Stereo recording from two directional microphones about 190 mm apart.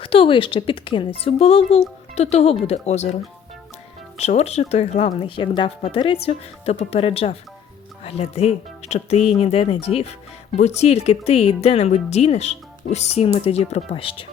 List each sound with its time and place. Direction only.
0.0 s speech: 30° left (ahead or behind)
4.2 s speech: 35° left (ahead or behind)